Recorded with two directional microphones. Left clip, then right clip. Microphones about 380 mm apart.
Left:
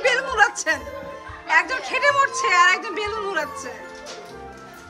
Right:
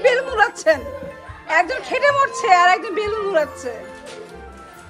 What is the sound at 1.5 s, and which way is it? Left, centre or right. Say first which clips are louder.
A woman's voice: right 1 dB; centre.